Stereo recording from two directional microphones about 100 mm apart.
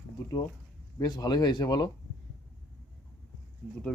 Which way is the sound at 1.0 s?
40° left (ahead or behind).